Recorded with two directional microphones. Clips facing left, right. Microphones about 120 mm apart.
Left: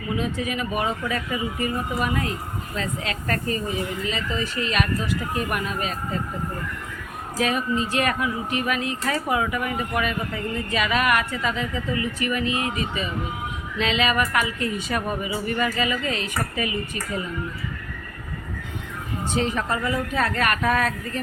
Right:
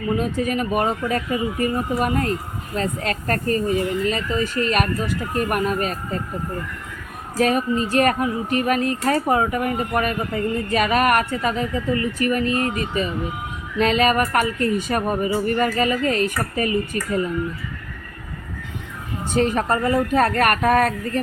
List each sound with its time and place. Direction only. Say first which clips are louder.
0.2 s speech: right 4 dB; 45° right (ahead or behind)
7.3 s speech: right 4 dB; 45° right (ahead or behind)
19.3 s speech: right 5 dB; 50° right (ahead or behind)